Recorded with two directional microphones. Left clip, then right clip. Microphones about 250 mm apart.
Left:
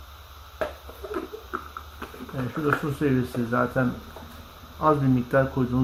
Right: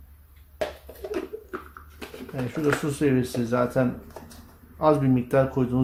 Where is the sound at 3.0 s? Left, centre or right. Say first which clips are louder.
Right 2 dB; right.